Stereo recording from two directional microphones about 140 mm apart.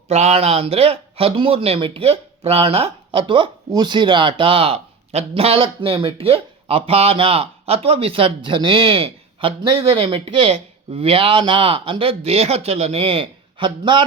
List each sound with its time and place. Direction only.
0.1 s a man's voice: 50° right (ahead or behind)